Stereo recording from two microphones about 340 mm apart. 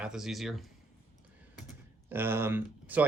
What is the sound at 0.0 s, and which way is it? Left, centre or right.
Speech, centre.